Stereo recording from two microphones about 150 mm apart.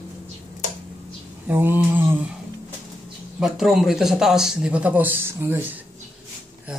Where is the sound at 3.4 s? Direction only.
Centre (ahead or behind).